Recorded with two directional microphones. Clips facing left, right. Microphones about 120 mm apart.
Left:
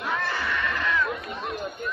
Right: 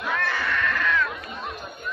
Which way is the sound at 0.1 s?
10° left (ahead or behind).